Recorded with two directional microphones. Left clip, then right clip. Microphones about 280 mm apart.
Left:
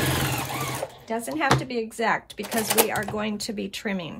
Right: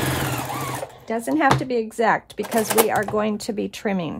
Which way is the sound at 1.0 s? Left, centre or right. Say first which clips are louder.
Right 6 dB; right.